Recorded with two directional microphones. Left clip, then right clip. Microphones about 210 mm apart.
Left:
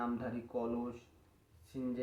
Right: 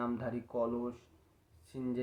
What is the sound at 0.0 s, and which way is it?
Speech, 40° right (ahead or behind).